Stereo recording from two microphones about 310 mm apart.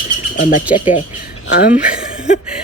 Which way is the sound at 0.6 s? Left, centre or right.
Centre.